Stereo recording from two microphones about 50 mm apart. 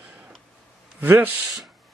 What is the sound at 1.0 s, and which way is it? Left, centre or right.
Speech, right.